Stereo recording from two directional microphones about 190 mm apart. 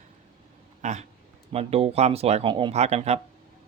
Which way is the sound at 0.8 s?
40° right (ahead or behind).